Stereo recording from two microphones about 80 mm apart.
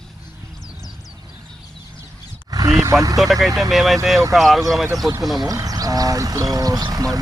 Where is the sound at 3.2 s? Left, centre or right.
Centre.